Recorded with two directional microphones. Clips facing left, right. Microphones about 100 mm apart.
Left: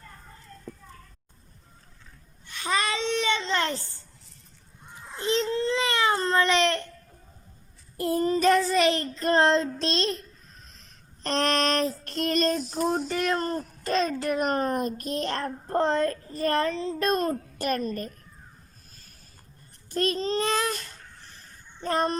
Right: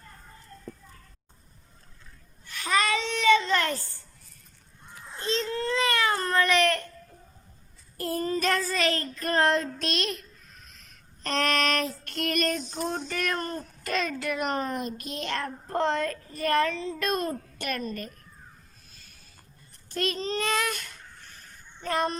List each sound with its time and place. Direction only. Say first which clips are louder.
2.5 s child singing: right 2 dB; 25° left (ahead or behind)
5.2 s baby cry: left 3 dB; 20° left (ahead or behind)
7.9 s child singing: left 4 dB; 20° left (ahead or behind)
13.1 s a sound: left 4 dB; 20° left (ahead or behind); by 18.1 s 40° left (ahead or behind)
19.9 s babbling: left 3 dB; 35° left (ahead or behind)
21.8 s child singing: left 2 dB; 40° left (ahead or behind)